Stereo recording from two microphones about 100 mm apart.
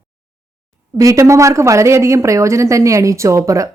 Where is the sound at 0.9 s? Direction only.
35° right (ahead or behind).